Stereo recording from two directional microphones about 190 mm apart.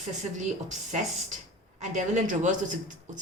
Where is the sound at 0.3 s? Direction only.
40° right (ahead or behind).